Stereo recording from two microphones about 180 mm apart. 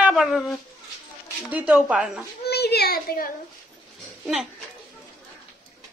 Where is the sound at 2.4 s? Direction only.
65° left (ahead or behind).